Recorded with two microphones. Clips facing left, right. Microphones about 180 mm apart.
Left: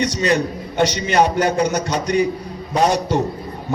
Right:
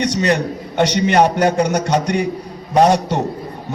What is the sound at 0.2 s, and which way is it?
Music, 65° right (ahead or behind).